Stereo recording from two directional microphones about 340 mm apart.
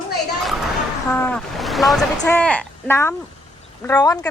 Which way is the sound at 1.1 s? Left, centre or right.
Centre.